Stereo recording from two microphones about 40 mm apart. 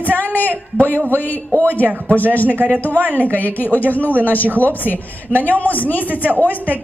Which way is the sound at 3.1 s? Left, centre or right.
Left.